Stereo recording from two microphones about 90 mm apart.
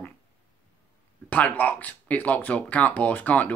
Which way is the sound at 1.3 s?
15° left (ahead or behind).